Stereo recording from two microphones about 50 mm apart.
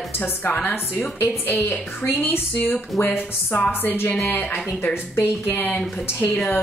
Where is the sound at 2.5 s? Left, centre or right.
Left.